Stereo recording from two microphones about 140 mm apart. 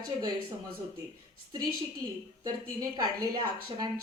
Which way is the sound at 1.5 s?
30° right (ahead or behind).